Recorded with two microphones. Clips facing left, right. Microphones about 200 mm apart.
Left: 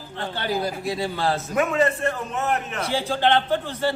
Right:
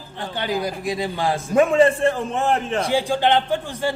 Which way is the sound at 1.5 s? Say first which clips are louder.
Right 8 dB; 30° right (ahead or behind).